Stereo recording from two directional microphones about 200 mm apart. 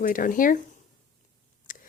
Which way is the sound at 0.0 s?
45° left (ahead or behind).